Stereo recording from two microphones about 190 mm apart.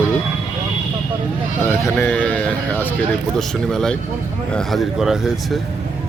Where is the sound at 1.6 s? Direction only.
10° left (ahead or behind).